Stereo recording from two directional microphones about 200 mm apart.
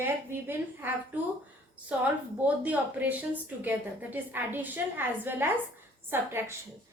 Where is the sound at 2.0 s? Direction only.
10° right (ahead or behind).